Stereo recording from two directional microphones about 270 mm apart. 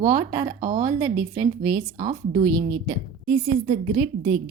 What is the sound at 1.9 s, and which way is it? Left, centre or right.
Speech, right.